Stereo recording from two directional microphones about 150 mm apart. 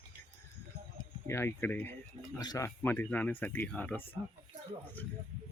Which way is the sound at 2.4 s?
25° left (ahead or behind).